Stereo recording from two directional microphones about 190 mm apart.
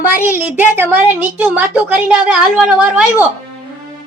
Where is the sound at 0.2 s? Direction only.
10° right (ahead or behind).